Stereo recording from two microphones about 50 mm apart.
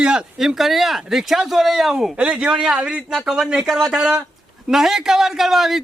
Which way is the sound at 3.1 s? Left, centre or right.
Centre.